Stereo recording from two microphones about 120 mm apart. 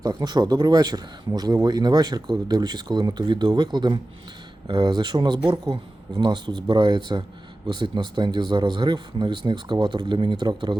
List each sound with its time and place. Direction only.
0.0 s speech: 35° right (ahead or behind)